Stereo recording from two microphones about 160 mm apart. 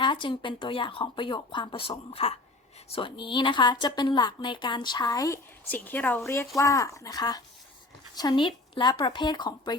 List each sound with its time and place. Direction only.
0.0 s a woman's voice: 30° left (ahead or behind)
5.6 s a woman's voice: 10° left (ahead or behind); by 9.7 s 25° left (ahead or behind)